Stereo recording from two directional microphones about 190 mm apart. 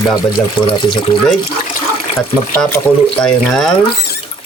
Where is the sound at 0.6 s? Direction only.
25° left (ahead or behind).